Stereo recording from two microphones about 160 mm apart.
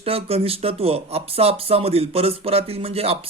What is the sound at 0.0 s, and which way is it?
Speech, 40° right (ahead or behind).